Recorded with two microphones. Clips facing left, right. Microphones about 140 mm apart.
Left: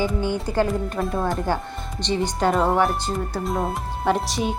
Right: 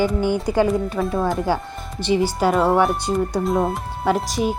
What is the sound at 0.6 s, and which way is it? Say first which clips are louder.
A woman's voice: right 4 dB; 5° right (ahead or behind).